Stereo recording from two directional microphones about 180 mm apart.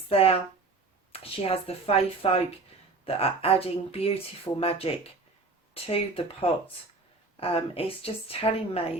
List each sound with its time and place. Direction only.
0.1 s a woman's voice: 35° left (ahead or behind)